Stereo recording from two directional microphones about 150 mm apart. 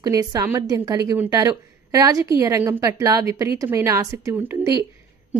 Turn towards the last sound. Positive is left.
turn(degrees=-15)  # may be behind; listen again after turning